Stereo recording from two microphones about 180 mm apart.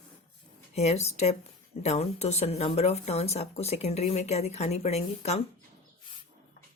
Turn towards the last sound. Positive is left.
turn(degrees=35)  # may be behind; listen again after turning